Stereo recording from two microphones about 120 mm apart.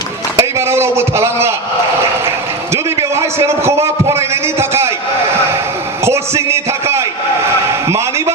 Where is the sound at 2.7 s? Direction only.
25° right (ahead or behind).